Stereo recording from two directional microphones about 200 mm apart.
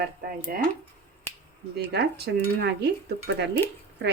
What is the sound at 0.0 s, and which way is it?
Speech, 45° right (ahead or behind).